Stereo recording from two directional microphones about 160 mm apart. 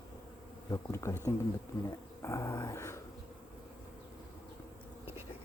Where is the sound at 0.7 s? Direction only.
20° left (ahead or behind).